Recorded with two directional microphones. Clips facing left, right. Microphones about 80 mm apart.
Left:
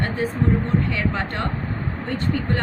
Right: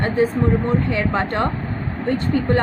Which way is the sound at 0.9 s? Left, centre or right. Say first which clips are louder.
Right 5 dB; right.